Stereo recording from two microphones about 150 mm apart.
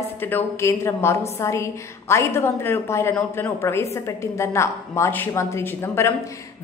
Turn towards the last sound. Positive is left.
turn(degrees=15)  # may be behind; listen again after turning